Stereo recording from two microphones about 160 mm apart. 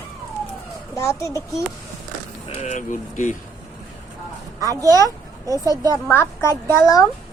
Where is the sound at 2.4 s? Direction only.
45° left (ahead or behind).